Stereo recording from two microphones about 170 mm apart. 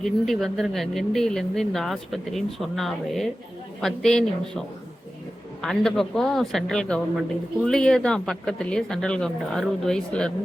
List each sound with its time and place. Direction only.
0.0 s speech: centre (ahead or behind)
5.6 s speech: centre (ahead or behind)